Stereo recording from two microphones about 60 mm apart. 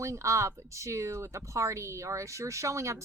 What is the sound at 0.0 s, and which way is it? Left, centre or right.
A woman's voice, right.